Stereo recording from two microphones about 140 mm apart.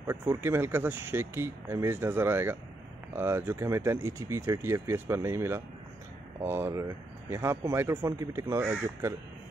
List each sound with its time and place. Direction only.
0.0 s speech: 15° right (ahead or behind)